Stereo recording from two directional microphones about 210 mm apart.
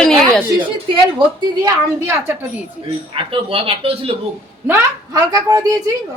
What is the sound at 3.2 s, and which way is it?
Speech, 25° right (ahead or behind).